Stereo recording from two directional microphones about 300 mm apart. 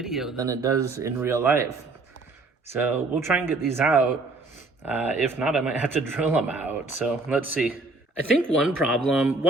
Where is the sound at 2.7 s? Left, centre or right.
Centre.